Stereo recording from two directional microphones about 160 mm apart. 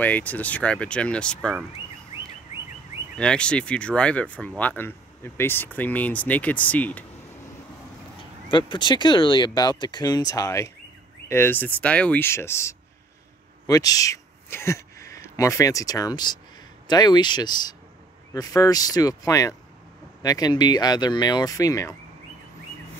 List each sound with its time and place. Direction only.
0.0 s speech: 10° left (ahead or behind)
3.2 s speech: 5° left (ahead or behind)
8.5 s speech: 30° left (ahead or behind)